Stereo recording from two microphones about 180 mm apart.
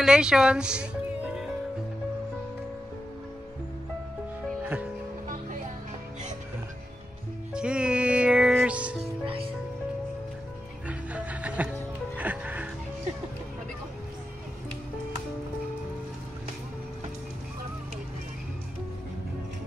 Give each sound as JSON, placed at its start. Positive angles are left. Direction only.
{"t": 0.0, "sound": "music", "side_deg": -5}
{"t": 7.5, "sound": "music", "side_deg": -5}
{"t": 9.0, "sound": "music", "side_deg": -30}
{"t": 10.9, "sound": "music", "side_deg": -10}